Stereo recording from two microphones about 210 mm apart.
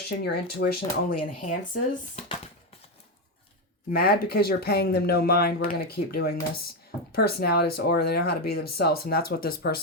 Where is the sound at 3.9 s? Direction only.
45° left (ahead or behind).